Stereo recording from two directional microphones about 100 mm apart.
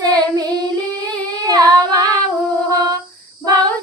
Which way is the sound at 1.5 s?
40° right (ahead or behind).